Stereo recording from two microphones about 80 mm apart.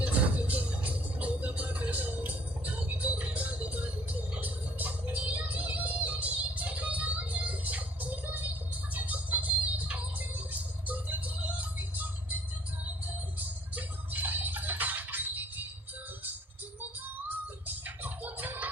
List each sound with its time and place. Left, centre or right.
0.0 s music: centre
8.9 s a sound: right
13.7 s music: right
17.8 s music: right